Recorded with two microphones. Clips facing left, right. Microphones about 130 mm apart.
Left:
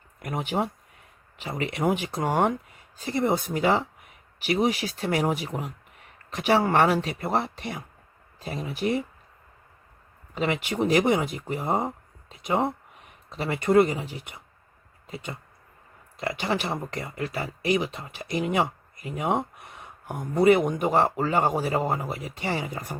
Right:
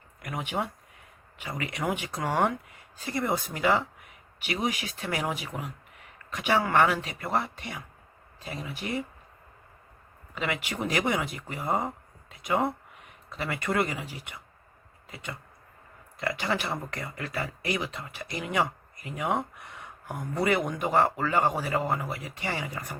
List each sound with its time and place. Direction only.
0.2 s speech: 30° left (ahead or behind)
10.3 s speech: 30° left (ahead or behind)